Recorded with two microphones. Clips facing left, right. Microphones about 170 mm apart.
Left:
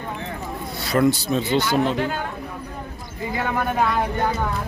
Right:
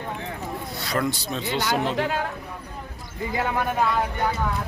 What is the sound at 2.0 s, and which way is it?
Speech, 90° right.